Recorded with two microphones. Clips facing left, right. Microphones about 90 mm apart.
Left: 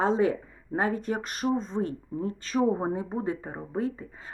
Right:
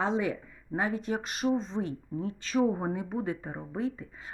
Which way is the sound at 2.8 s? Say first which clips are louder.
Left 3 dB; 30° left (ahead or behind).